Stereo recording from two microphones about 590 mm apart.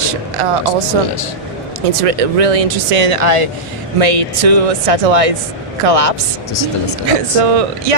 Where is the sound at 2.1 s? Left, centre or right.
Right.